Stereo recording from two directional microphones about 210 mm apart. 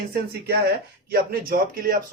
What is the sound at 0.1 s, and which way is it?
Speech, 50° right (ahead or behind).